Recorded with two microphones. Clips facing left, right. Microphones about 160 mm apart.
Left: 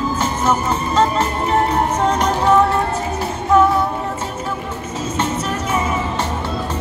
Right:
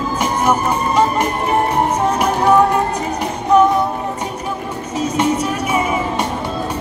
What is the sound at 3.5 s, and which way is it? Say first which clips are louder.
Music: right 2 dB; 20° right (ahead or behind).